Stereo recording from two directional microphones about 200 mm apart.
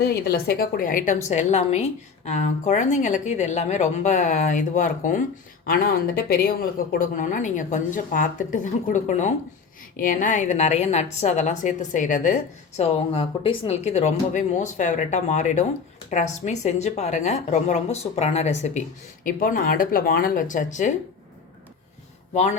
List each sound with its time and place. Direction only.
0.0 s a woman's voice: 55° left (ahead or behind)